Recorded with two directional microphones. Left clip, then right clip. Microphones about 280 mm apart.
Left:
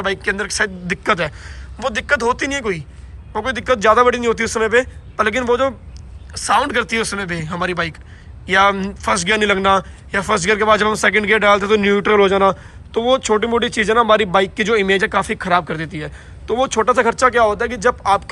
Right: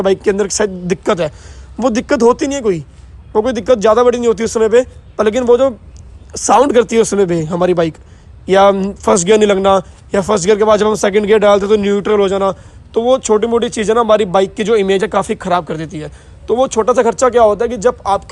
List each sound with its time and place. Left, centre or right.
0.0 s a man's voice: right